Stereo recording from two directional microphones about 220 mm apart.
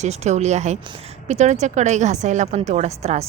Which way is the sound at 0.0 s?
30° right (ahead or behind).